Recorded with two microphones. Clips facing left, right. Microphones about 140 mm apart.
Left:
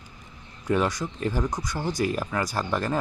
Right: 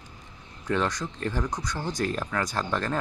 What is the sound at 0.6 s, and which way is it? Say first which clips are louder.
Speech: left 3 dB; 10° left (ahead or behind).